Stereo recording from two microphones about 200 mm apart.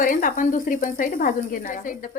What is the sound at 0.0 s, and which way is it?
Speech, 40° left (ahead or behind).